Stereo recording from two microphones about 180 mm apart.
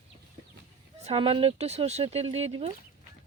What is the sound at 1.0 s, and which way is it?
Speech, 30° right (ahead or behind).